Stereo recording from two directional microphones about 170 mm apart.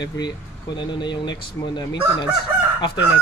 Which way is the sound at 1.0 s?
25° left (ahead or behind).